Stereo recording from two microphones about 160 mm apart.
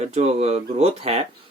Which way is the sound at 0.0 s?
40° right (ahead or behind).